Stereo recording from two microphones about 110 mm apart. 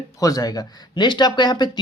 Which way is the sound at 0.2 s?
35° left (ahead or behind).